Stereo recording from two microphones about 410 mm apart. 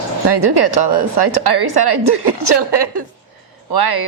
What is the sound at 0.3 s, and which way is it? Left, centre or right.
A woman's voice, right.